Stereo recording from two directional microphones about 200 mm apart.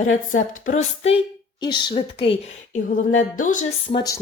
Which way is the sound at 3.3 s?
40° left (ahead or behind).